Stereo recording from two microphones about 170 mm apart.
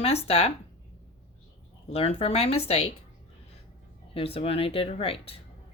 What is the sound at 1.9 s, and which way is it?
Speech, 35° left (ahead or behind).